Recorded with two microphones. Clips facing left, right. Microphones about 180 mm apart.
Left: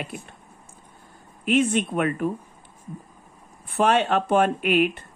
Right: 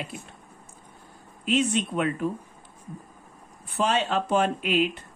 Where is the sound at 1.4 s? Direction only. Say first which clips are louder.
Left 3 dB; 55° left (ahead or behind).